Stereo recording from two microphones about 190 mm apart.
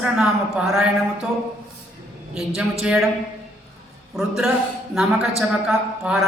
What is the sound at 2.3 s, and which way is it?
Speech, centre (ahead or behind).